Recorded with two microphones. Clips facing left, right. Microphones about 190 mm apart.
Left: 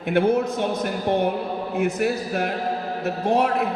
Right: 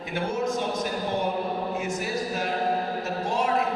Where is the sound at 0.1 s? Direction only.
60° left (ahead or behind).